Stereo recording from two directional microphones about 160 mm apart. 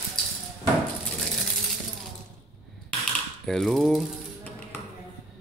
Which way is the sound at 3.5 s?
5° left (ahead or behind).